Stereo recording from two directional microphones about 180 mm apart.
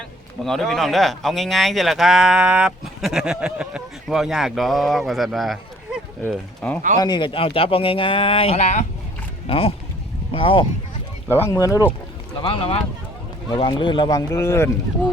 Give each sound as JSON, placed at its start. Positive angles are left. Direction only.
{"t": 0.4, "sound": "speech", "side_deg": 0}
{"t": 7.0, "sound": "speech", "side_deg": 25}
{"t": 11.3, "sound": "speech", "side_deg": 15}
{"t": 12.4, "sound": "speech", "side_deg": 30}